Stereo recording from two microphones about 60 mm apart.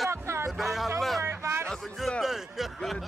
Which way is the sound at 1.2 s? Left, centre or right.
Right.